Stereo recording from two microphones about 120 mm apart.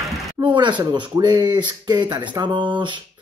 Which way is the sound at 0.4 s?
40° right (ahead or behind).